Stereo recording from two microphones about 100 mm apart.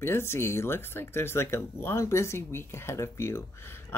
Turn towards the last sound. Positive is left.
turn(degrees=25)  # may be behind; listen again after turning